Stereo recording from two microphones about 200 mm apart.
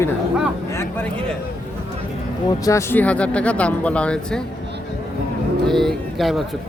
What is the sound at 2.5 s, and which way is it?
Speech, 15° left (ahead or behind).